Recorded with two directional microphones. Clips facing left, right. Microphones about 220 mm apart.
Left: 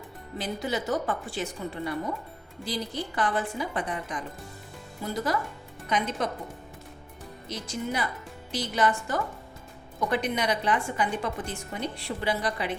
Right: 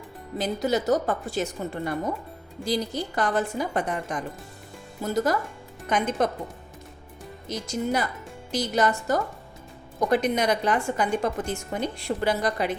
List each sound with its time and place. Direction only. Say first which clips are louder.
0.3 s a woman's voice: right 6 dB; 40° right (ahead or behind)
7.4 s a woman's voice: right 5 dB; 40° right (ahead or behind)